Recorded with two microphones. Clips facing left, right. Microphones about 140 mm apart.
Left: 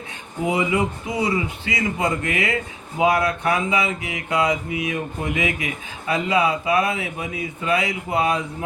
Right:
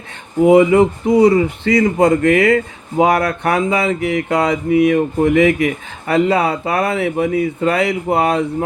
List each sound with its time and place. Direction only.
0.4 s speech: 50° right (ahead or behind)